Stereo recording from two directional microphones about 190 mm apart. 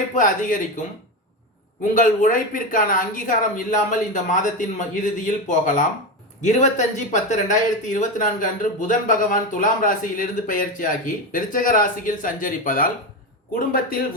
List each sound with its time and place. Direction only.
0.1 s speech: 45° left (ahead or behind)
2.0 s speech: 45° left (ahead or behind)